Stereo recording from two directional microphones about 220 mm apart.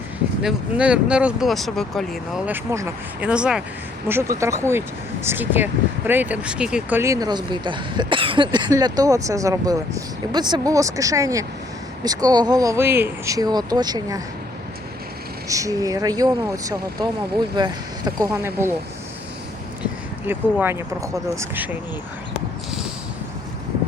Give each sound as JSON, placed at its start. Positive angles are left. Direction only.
{"t": 0.4, "sound": "speech", "side_deg": -5}
{"t": 2.5, "sound": "speech", "side_deg": -10}
{"t": 15.4, "sound": "speech", "side_deg": -15}
{"t": 20.2, "sound": "speech", "side_deg": -10}